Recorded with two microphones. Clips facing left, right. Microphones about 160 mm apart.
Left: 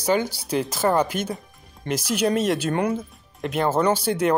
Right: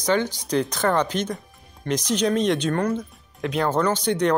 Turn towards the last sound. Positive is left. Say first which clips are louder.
# left 1 dB
turn(degrees=5)  # may be behind; listen again after turning